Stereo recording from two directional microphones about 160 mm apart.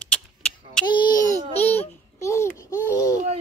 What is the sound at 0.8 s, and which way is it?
Speech, 25° left (ahead or behind).